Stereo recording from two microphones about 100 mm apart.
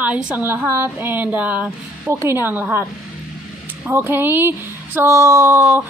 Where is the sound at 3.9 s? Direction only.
25° right (ahead or behind).